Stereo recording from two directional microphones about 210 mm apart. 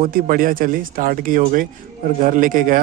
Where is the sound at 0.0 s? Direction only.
45° right (ahead or behind).